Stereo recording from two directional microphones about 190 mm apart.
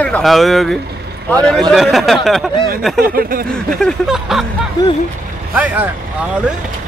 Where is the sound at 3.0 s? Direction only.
50° right (ahead or behind).